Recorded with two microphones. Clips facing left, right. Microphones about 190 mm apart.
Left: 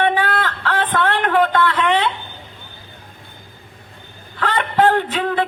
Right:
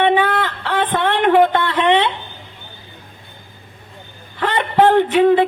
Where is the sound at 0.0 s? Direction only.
20° right (ahead or behind).